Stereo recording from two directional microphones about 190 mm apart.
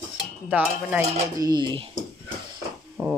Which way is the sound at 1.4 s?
20° right (ahead or behind).